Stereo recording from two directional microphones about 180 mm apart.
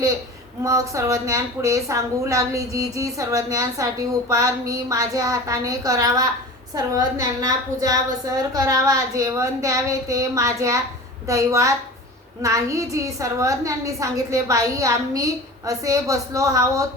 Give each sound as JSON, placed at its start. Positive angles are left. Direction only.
{"t": 0.6, "sound": "a woman's voice", "side_deg": -15}